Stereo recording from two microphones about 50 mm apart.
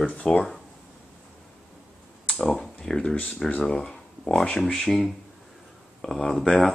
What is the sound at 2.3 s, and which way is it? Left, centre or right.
Speech, centre.